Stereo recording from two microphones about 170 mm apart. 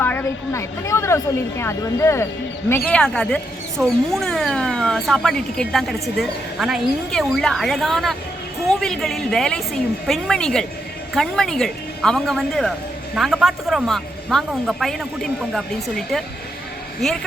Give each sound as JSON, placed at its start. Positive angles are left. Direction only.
{"t": 0.0, "sound": "a woman's voice", "side_deg": 10}